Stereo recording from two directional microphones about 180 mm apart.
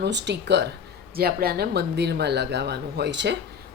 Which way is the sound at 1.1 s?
55° right (ahead or behind).